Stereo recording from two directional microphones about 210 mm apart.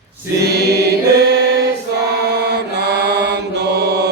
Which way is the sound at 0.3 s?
50° right (ahead or behind).